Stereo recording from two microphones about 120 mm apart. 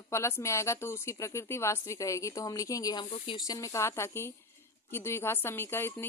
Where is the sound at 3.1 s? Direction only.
55° left (ahead or behind).